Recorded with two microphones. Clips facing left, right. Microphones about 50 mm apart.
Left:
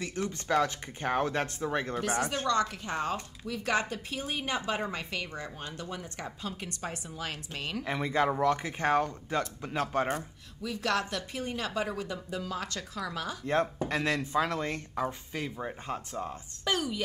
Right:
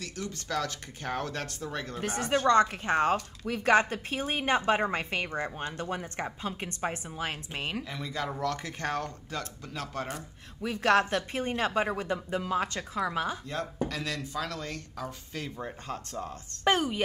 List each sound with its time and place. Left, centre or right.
0.0 s speech: left
2.2 s a woman's voice: right
7.8 s speech: left
10.6 s a woman's voice: right
13.8 s speech: left
15.3 s speech: centre
16.6 s a woman's voice: right